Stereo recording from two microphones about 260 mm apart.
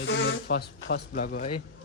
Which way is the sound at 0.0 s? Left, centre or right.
Left.